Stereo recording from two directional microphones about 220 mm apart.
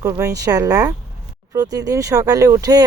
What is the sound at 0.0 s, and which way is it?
Speech, 15° right (ahead or behind).